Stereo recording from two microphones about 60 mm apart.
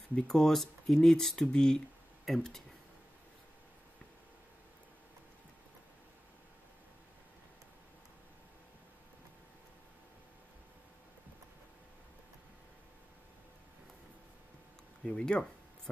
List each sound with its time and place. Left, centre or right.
0.3 s speech: centre
15.0 s speech: centre